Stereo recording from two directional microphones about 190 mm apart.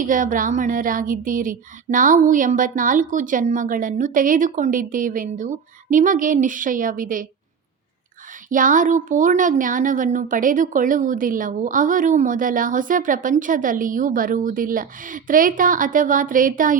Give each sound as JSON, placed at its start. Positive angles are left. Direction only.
{"t": 0.0, "sound": "speech", "side_deg": -45}
{"t": 8.4, "sound": "speech", "side_deg": -45}